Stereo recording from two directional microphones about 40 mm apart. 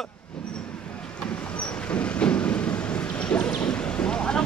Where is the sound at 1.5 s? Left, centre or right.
Left.